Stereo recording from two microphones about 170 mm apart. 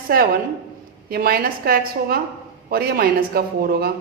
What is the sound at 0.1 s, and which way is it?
Speech, 60° right (ahead or behind).